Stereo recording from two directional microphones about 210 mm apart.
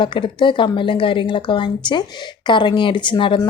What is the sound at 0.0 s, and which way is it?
Speech, 20° left (ahead or behind).